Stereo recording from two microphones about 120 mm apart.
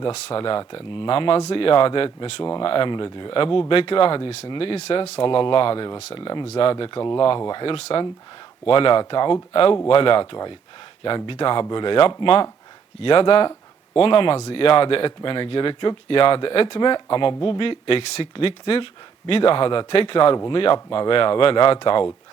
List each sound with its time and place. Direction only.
0.1 s speech: 50° left (ahead or behind)
7.6 s speech: 50° left (ahead or behind)